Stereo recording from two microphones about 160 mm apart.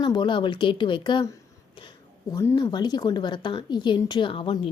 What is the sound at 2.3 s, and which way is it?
Speech, 20° left (ahead or behind).